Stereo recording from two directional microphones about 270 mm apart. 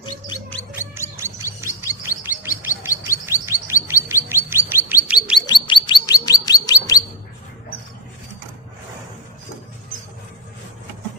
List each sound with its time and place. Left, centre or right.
1.1 s gargling: centre
1.9 s chirp: centre
5.5 s bird: centre
6.2 s chirp: centre